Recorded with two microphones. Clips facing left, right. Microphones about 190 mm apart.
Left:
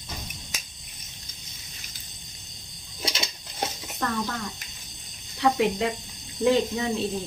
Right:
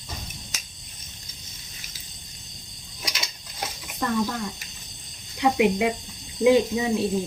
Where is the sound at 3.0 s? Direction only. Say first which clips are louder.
Left 4 dB; 25° left (ahead or behind).